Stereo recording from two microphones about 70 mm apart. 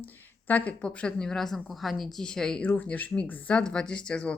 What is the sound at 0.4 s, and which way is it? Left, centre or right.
A woman's voice, left.